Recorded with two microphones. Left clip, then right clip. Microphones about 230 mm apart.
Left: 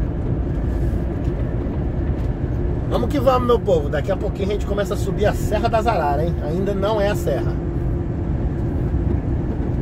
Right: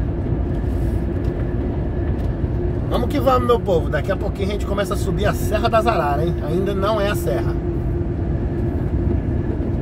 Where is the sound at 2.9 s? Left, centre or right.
Centre.